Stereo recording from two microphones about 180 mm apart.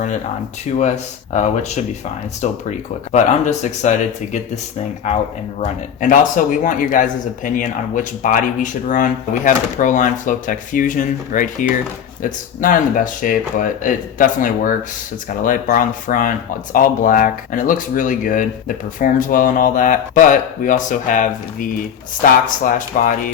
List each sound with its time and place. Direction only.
0.6 s speech: 40° left (ahead or behind)